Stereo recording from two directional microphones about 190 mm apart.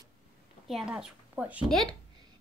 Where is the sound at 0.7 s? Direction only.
Centre (ahead or behind).